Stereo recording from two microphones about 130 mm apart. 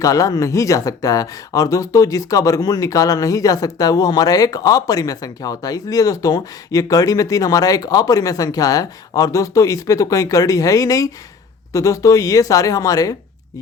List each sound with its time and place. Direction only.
0.0 s speech: 25° left (ahead or behind)